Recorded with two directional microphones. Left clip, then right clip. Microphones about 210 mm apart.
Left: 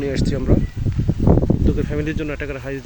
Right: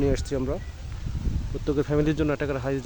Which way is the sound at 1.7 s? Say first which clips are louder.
Even; 10° right (ahead or behind).